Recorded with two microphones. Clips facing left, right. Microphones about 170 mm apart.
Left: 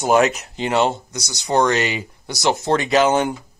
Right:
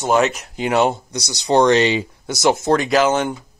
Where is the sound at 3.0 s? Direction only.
35° left (ahead or behind).